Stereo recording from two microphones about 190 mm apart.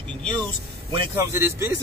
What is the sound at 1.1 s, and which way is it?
Speech, 15° right (ahead or behind).